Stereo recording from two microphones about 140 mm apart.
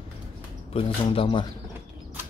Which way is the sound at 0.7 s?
45° left (ahead or behind).